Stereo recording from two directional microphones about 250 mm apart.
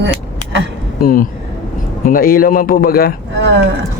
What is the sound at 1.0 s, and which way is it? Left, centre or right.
A man's voice, left.